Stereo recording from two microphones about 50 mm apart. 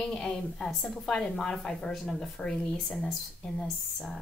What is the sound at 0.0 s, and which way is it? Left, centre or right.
A woman's voice, centre.